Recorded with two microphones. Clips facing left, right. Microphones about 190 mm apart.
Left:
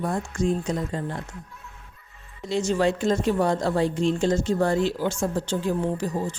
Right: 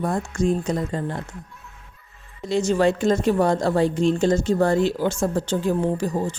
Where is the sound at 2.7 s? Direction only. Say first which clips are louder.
Right 3 dB; 50° right (ahead or behind).